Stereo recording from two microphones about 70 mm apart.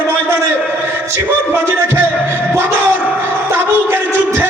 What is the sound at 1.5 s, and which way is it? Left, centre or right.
Music, right.